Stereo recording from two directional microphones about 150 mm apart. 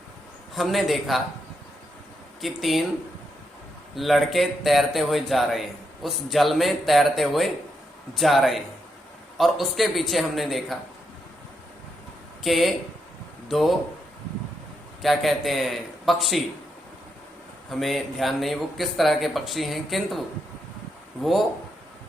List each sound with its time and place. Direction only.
0.5 s speech: centre (ahead or behind)
2.4 s speech: centre (ahead or behind)
3.9 s speech: centre (ahead or behind)
12.4 s speech: centre (ahead or behind)
15.0 s speech: centre (ahead or behind)
17.7 s speech: centre (ahead or behind)